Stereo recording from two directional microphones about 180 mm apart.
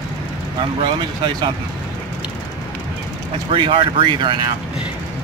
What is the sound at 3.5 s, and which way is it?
Speech, 30° right (ahead or behind).